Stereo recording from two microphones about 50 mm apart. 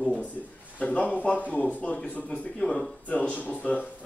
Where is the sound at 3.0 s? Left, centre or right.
Left.